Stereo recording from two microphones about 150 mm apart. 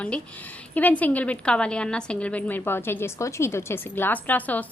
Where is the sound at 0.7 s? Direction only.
10° left (ahead or behind).